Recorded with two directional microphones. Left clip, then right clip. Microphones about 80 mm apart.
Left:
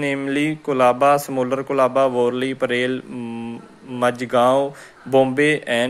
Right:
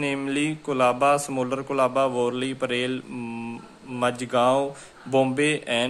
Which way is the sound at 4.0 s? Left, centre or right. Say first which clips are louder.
Left 5 dB; left.